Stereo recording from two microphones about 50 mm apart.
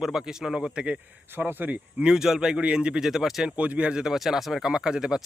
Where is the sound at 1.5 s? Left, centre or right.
Right.